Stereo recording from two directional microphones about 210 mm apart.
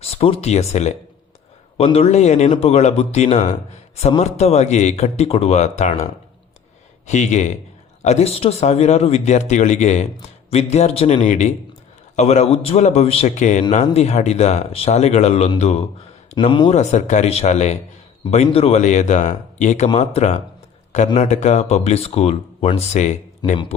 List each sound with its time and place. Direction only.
0.0 s a man's voice: 30° left (ahead or behind)
7.1 s a man's voice: 35° left (ahead or behind)
23.4 s speech: 20° left (ahead or behind)